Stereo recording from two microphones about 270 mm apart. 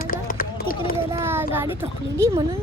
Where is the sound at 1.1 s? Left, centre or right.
Centre.